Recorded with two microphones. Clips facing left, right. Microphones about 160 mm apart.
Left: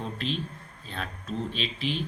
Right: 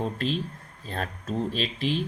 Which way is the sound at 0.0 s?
45° right (ahead or behind).